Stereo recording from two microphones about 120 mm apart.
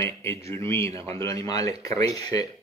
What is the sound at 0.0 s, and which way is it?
Speech, 20° left (ahead or behind).